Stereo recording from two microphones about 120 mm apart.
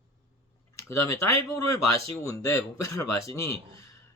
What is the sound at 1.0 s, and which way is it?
Speech, 25° left (ahead or behind).